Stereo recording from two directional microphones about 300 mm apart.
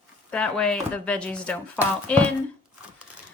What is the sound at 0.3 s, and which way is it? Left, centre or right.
Speech, centre.